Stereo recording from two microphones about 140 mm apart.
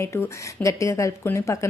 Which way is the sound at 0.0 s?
20° left (ahead or behind).